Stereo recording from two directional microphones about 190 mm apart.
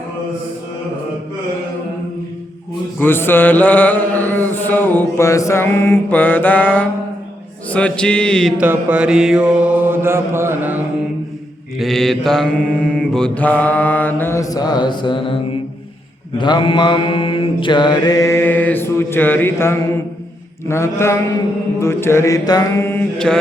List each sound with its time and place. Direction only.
3.0 s chant: 10° left (ahead or behind)
7.7 s mantra: 5° left (ahead or behind)
8.6 s mantra: 10° right (ahead or behind)
11.8 s chant: centre (ahead or behind); by 15.4 s 25° left (ahead or behind)
16.4 s mantra: 25° left (ahead or behind)
20.7 s chant: 15° left (ahead or behind)